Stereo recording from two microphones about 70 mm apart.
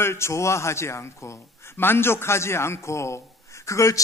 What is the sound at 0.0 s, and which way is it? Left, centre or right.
A man's voice, left.